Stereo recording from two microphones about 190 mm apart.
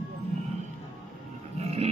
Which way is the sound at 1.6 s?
35° right (ahead or behind).